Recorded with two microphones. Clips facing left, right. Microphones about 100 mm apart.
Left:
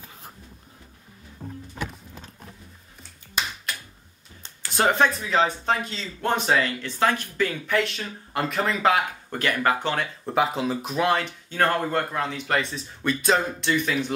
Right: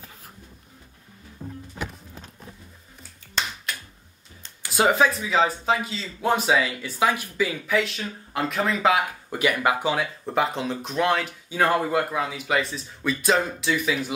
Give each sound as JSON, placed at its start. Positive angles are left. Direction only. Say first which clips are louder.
{"t": 3.4, "sound": "finger snapping", "louder": "even", "side_deg": 10}
{"t": 4.7, "sound": "speech", "louder": "right 1 dB", "side_deg": -5}